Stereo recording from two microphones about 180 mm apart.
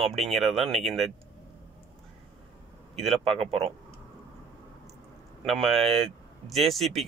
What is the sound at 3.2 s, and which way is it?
Speech, 30° right (ahead or behind).